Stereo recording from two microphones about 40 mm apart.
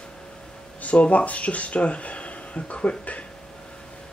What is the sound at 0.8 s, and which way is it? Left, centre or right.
Speech, left.